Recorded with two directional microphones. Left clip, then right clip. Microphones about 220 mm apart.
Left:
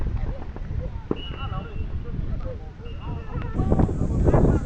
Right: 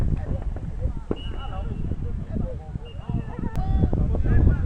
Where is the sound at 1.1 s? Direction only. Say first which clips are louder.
Left 2 dB; 35° left (ahead or behind).